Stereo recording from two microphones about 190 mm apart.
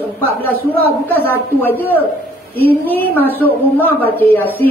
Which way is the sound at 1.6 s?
10° left (ahead or behind).